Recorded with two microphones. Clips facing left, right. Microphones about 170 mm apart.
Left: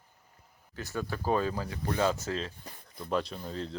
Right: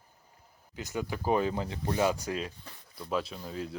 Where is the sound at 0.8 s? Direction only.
15° right (ahead or behind).